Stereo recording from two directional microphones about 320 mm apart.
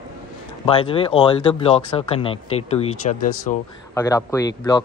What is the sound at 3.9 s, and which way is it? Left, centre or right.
Speech, centre.